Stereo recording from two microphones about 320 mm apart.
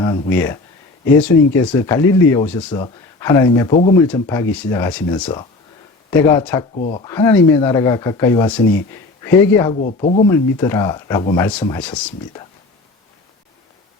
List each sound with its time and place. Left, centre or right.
0.0 s speech: centre
9.8 s speech: left
10.2 s speech: centre